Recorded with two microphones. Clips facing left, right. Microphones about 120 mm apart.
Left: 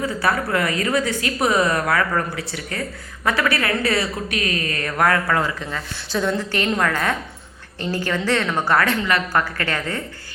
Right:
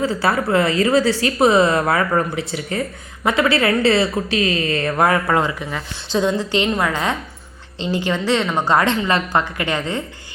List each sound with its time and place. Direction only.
0.0 s a woman's voice: 25° right (ahead or behind)